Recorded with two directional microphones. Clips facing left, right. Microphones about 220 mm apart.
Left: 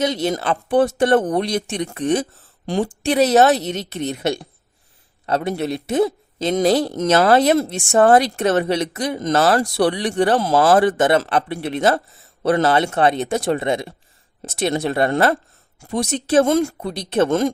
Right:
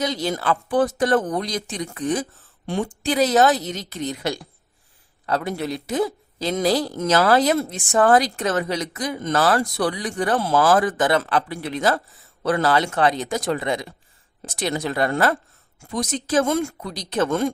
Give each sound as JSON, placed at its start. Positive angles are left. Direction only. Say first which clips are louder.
{"t": 0.0, "sound": "a woman's voice", "louder": "left 4 dB", "side_deg": 25}